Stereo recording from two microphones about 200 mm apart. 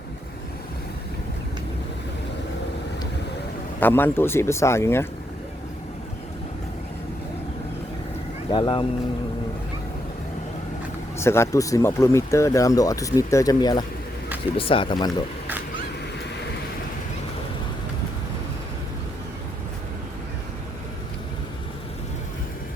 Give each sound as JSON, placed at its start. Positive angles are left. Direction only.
{"t": 3.8, "sound": "speech", "side_deg": 10}
{"t": 8.4, "sound": "speech", "side_deg": 25}
{"t": 11.2, "sound": "speech", "side_deg": 15}